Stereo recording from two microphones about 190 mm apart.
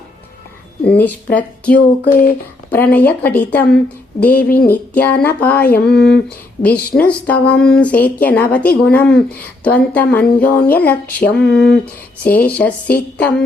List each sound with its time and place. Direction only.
0.9 s speech: 10° left (ahead or behind)
4.4 s speech: 50° left (ahead or behind)
4.7 s speech: 10° left (ahead or behind)
5.7 s a sound: 5° left (ahead or behind)
6.9 s speech: 5° left (ahead or behind)